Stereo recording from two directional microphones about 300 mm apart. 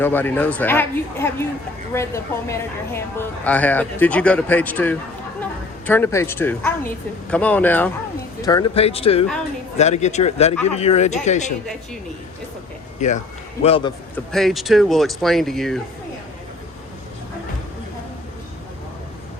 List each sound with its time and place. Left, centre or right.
0.0 s a woman's voice: centre; by 11.5 s left
13.0 s a man's voice: left
14.3 s a woman's voice: centre